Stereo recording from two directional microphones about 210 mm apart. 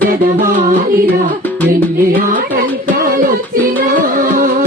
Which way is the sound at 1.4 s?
10° left (ahead or behind).